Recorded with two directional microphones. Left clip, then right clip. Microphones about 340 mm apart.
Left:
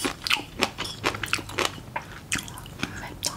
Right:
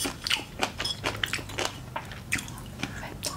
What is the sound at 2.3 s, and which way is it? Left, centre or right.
Chewing, left.